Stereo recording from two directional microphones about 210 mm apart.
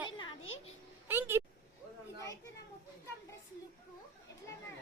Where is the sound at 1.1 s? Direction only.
10° right (ahead or behind).